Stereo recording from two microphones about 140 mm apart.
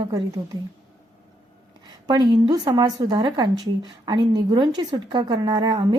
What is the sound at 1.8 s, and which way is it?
A woman's voice, 30° right (ahead or behind).